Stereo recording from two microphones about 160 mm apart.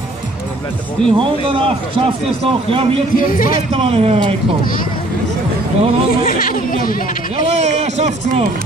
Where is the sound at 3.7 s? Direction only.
35° right (ahead or behind).